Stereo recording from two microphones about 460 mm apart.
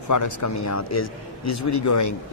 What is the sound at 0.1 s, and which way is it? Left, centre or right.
Speech, left.